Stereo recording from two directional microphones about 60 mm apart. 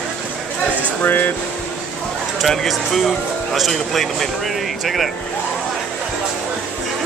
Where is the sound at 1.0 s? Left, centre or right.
Left.